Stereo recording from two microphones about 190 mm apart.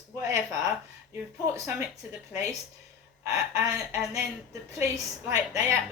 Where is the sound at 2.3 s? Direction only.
15° right (ahead or behind).